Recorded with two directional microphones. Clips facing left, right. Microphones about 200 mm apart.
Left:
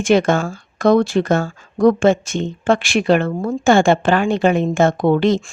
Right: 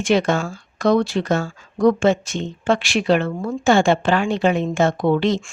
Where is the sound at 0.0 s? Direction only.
50° left (ahead or behind).